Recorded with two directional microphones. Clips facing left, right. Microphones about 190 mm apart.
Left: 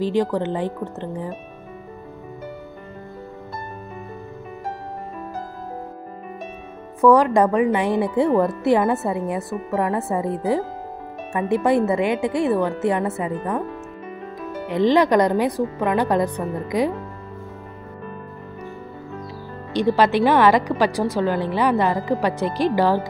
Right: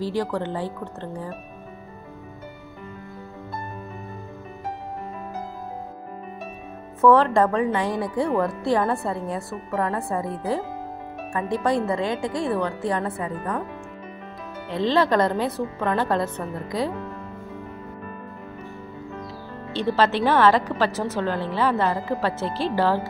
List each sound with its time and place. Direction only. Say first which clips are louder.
0.0 s speech: left 5 dB; 20° left (ahead or behind)
7.0 s a woman's voice: left 2 dB; 15° left (ahead or behind)
14.7 s a woman's voice: left 4 dB; 15° left (ahead or behind)
19.7 s a woman's voice: left 4 dB; 15° left (ahead or behind)